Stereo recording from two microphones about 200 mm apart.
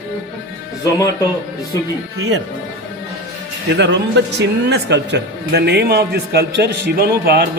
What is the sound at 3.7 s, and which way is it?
A man's voice, 60° right (ahead or behind).